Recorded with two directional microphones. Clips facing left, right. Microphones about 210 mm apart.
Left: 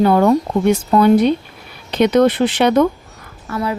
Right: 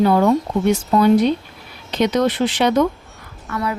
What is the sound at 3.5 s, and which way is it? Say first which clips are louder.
Speech: left 2 dB; 30° left (ahead or behind).